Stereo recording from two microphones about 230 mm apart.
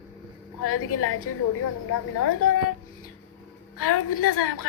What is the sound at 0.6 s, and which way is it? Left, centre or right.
Speech, left.